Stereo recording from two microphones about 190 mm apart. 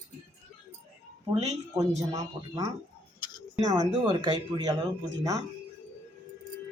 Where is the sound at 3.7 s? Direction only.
20° right (ahead or behind).